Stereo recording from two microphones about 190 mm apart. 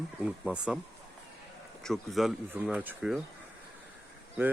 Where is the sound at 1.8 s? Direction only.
Centre (ahead or behind).